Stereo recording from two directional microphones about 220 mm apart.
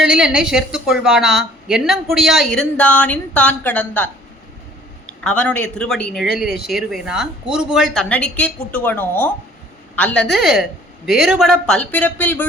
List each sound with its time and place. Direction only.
0.0 s a woman's voice: 5° right (ahead or behind)
5.2 s a woman's voice: 5° left (ahead or behind)